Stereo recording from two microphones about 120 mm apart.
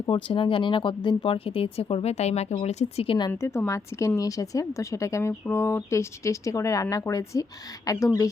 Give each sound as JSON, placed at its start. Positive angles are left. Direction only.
{"t": 0.0, "sound": "speech", "side_deg": 45}
{"t": 3.3, "sound": "a woman's voice", "side_deg": 20}